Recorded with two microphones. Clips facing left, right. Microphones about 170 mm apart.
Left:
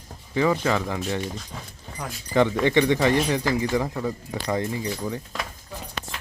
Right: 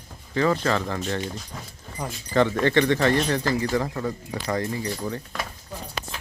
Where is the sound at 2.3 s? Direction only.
15° left (ahead or behind).